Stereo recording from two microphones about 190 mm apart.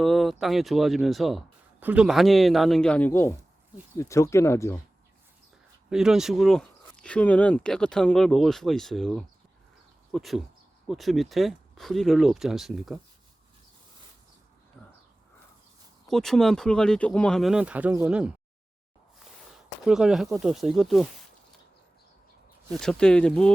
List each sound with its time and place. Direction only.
0.0 s speech: centre (ahead or behind)
5.9 s speech: centre (ahead or behind)
14.8 s a sound: 5° left (ahead or behind)
16.0 s speech: centre (ahead or behind)
19.8 s speech: 5° right (ahead or behind)
22.8 s speech: 5° left (ahead or behind)